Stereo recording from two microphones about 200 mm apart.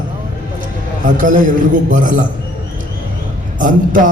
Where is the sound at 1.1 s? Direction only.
40° right (ahead or behind).